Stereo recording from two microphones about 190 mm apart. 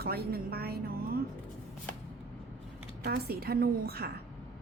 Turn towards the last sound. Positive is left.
turn(degrees=-55)  # may be behind; listen again after turning